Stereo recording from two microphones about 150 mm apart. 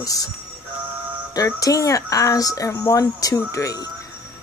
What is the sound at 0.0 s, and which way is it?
Speech, 25° left (ahead or behind).